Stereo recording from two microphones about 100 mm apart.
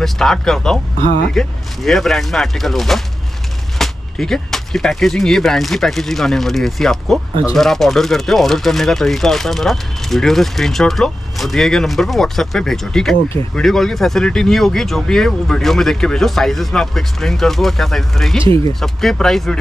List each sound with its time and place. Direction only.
0.0 s speech: 5° left (ahead or behind)